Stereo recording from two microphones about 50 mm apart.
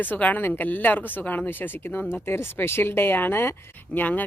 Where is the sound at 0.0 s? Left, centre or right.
Left.